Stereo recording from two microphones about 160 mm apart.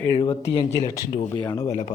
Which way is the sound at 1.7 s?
45° left (ahead or behind).